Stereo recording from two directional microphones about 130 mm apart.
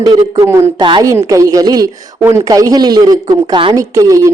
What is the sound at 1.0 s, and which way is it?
Speech, 25° right (ahead or behind).